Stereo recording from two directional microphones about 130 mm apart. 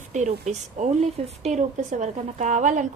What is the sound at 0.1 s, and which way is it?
A woman's voice, 65° right (ahead or behind).